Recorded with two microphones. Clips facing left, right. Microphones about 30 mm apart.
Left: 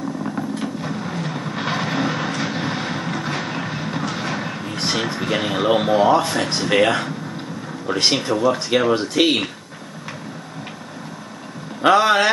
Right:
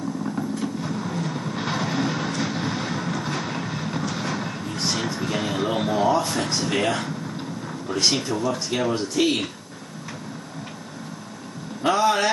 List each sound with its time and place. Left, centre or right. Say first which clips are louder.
0.6 s vehicle: left 2 dB; left
4.7 s vehicle: left 4 dB; left
5.0 s speech: left 4 dB; left
11.8 s speech: left 5 dB; left